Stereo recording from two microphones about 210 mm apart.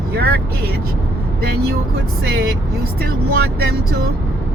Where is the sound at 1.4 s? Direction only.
50° right (ahead or behind).